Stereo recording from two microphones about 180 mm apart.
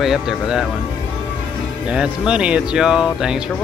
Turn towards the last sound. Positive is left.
turn(degrees=-5)  # may be behind; listen again after turning